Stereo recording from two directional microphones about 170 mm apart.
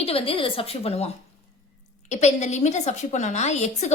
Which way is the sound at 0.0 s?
35° left (ahead or behind).